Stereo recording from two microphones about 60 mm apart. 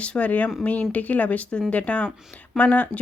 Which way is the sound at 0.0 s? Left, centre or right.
Left.